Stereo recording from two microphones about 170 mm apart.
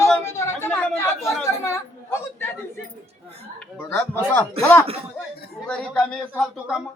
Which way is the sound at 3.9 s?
10° left (ahead or behind).